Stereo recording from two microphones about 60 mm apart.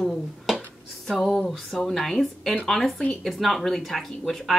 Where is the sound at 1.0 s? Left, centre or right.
Centre.